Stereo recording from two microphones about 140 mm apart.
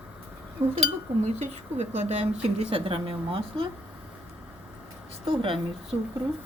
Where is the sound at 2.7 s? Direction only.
40° right (ahead or behind).